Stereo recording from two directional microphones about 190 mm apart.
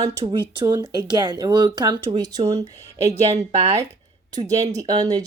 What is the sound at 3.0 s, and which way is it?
Speech, 35° right (ahead or behind).